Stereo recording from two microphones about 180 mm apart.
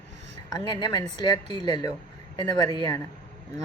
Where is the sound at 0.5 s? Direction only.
20° left (ahead or behind).